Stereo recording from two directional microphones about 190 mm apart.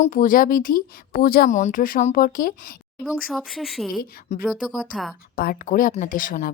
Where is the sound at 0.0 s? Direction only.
45° left (ahead or behind).